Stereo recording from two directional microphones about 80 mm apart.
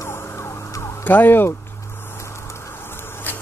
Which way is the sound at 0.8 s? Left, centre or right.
Left.